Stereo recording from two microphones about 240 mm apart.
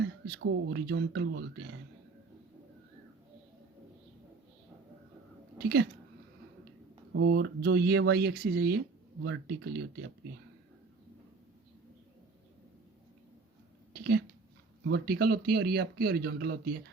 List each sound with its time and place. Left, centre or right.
0.0 s speech: right
5.5 s speech: right
7.3 s speech: right
13.9 s a sound: right
14.8 s speech: right